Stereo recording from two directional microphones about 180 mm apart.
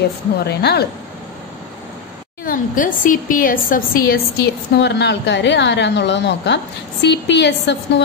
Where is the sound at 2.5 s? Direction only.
50° left (ahead or behind).